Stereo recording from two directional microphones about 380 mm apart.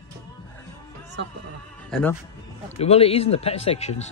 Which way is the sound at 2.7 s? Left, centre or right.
Centre.